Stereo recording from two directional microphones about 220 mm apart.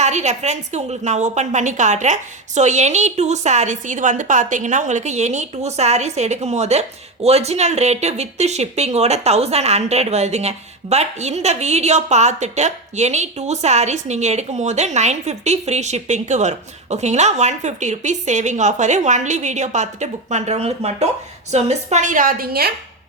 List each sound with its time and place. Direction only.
0.0 s a woman's voice: 30° right (ahead or behind)